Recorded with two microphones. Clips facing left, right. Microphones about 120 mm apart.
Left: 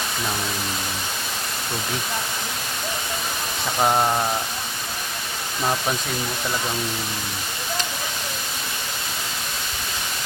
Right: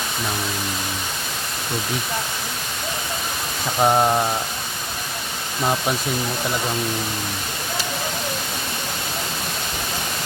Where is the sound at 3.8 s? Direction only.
10° right (ahead or behind).